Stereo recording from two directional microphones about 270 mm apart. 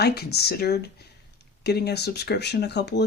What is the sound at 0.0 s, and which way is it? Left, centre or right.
Speech, left.